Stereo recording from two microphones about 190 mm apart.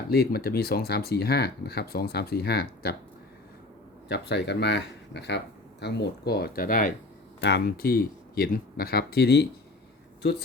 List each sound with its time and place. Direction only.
0.1 s speech: 55° left (ahead or behind)
4.1 s speech: 65° left (ahead or behind); by 6.9 s 45° left (ahead or behind)
7.4 s speech: 55° left (ahead or behind)